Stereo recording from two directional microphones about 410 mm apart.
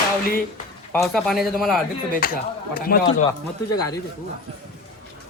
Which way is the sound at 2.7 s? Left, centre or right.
Left.